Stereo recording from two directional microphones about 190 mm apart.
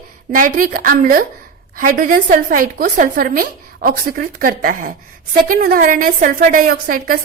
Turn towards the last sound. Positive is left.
turn(degrees=-50)  # may be behind; listen again after turning